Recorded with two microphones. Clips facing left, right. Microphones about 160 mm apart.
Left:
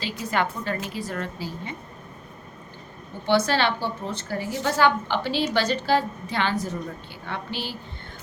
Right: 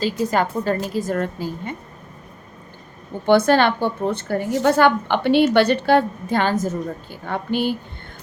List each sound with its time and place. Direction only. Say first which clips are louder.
0.0 s a woman's voice: right 6 dB; 40° right (ahead or behind)
3.2 s a woman's voice: right 7 dB; 50° right (ahead or behind)